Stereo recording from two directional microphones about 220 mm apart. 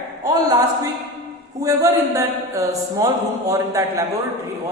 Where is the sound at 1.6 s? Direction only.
15° right (ahead or behind).